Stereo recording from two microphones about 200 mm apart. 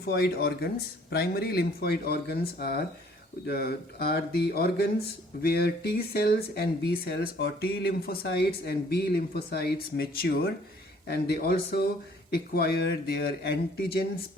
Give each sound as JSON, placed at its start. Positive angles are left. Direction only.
{"t": 0.0, "sound": "speech", "side_deg": 50}